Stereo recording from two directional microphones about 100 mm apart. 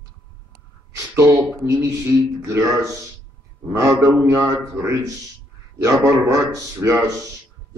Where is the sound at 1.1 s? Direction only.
30° right (ahead or behind).